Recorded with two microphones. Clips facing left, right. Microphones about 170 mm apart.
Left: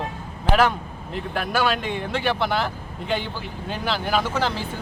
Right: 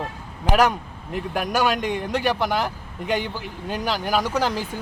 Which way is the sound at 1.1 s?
10° right (ahead or behind).